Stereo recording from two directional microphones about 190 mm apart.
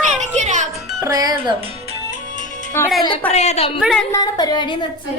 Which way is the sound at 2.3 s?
45° right (ahead or behind).